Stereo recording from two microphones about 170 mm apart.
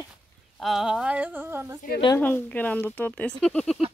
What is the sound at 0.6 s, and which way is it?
Speech, centre (ahead or behind).